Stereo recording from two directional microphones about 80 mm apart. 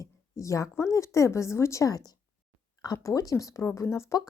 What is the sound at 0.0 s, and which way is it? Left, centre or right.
A woman's voice, left.